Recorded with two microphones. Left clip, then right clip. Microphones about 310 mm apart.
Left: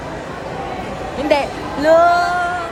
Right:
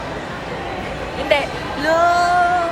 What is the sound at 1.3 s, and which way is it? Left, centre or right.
Speech, left.